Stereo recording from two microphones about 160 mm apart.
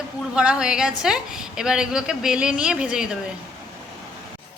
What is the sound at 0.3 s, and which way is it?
A woman's voice, 5° right (ahead or behind).